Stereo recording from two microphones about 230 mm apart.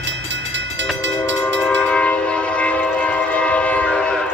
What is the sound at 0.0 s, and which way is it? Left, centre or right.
Train, right.